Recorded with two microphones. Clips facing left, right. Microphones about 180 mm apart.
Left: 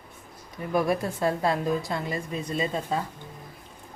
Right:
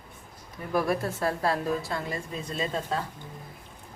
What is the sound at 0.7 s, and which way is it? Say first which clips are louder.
A woman's voice: left 2 dB; 15° left (ahead or behind).